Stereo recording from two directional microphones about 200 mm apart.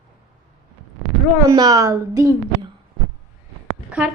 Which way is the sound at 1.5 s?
20° right (ahead or behind).